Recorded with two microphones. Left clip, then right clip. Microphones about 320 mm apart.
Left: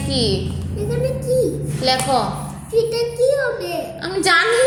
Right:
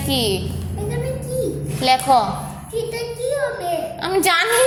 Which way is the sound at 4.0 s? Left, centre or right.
Right.